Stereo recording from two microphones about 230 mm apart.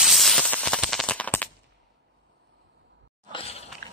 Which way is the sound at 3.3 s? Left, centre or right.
Left.